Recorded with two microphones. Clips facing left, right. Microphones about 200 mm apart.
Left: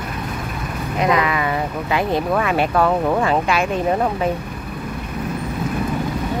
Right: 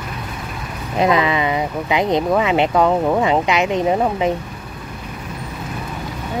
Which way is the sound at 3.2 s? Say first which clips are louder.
Right 2 dB; 20° right (ahead or behind).